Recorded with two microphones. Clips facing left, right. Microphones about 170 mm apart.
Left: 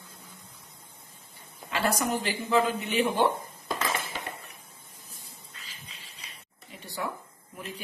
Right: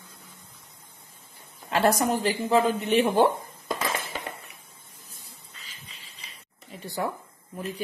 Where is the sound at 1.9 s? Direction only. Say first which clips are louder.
Right 4 dB; 40° right (ahead or behind).